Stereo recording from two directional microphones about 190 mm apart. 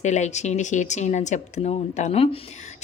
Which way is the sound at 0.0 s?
40° left (ahead or behind).